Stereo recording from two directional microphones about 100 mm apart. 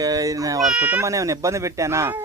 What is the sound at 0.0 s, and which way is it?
Speech, 35° right (ahead or behind).